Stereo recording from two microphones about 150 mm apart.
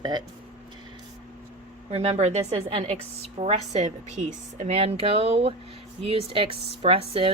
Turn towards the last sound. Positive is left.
turn(degrees=-40)  # may be behind; listen again after turning